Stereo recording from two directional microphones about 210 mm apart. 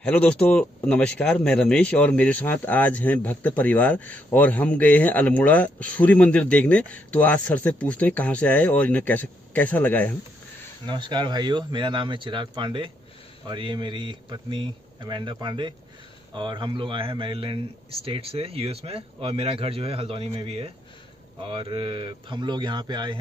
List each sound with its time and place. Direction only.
0.0 s speech: 5° left (ahead or behind)
10.9 s speech: 20° right (ahead or behind)